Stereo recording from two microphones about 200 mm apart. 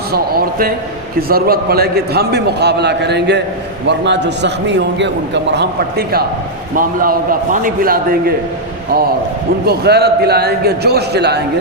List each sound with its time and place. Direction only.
0.1 s a man's voice: 50° right (ahead or behind)
9.6 s a man's voice: 55° right (ahead or behind)